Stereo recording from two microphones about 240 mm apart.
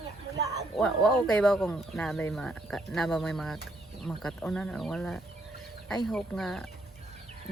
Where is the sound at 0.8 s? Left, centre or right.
Centre.